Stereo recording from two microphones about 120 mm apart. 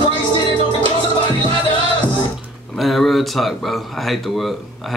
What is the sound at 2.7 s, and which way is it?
Speech, centre (ahead or behind).